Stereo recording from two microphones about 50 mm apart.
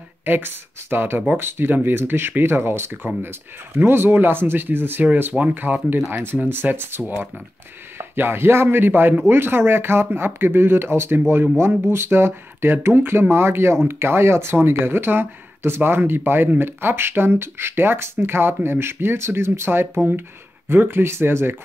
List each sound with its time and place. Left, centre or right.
0.2 s speech: right
5.9 s speech: centre
6.5 s speech: right
8.0 s speech: right